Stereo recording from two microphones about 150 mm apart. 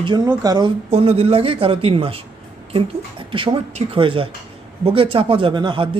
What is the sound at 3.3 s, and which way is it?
Speech, 35° right (ahead or behind).